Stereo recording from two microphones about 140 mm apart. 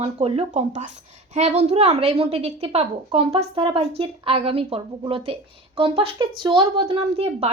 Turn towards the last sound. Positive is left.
turn(degrees=-45)  # may be behind; listen again after turning